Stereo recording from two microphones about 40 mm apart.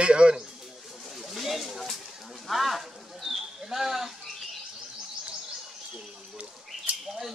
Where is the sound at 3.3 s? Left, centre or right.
Centre.